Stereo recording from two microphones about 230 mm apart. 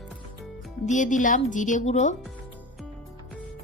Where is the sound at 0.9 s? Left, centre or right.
Left.